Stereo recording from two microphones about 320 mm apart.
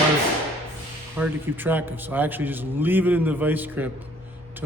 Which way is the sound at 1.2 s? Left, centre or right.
Centre.